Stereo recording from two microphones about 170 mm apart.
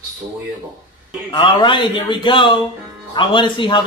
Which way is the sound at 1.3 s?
25° left (ahead or behind).